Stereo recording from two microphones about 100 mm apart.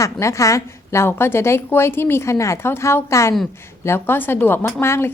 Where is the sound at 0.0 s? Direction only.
30° left (ahead or behind).